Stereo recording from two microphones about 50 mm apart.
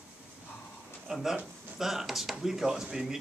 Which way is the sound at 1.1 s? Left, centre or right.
Centre.